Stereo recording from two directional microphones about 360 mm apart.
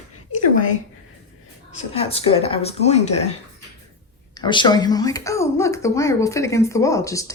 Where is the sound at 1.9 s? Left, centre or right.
Centre.